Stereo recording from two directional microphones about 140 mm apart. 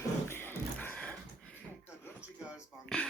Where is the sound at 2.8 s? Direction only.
5° left (ahead or behind).